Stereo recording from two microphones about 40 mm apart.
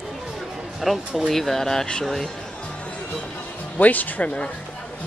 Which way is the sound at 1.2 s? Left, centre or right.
Centre.